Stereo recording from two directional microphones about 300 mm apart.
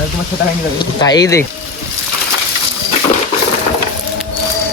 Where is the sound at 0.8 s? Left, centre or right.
Centre.